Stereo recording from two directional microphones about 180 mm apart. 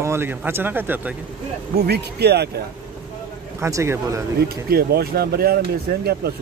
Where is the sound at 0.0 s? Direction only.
15° right (ahead or behind).